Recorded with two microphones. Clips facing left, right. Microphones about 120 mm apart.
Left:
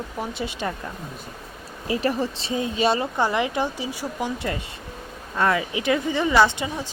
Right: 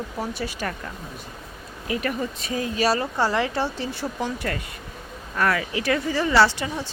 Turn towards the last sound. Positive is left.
turn(degrees=15)  # may be behind; listen again after turning